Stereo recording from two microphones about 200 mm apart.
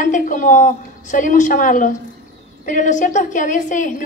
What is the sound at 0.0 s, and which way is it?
A woman's voice, 40° left (ahead or behind).